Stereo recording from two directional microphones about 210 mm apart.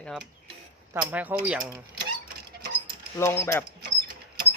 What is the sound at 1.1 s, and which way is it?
Speech, 10° right (ahead or behind).